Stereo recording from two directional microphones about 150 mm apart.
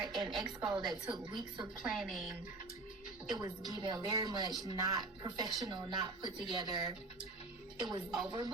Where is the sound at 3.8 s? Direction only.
25° right (ahead or behind).